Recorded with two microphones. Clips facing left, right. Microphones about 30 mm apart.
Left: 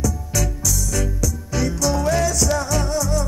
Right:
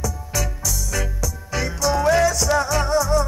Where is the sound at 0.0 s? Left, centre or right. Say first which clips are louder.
Left 2 dB; centre.